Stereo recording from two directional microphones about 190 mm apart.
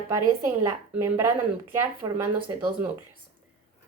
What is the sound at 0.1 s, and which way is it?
Speech, 15° right (ahead or behind).